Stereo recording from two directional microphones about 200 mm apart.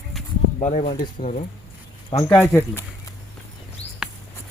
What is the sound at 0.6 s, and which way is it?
Speech, 30° left (ahead or behind).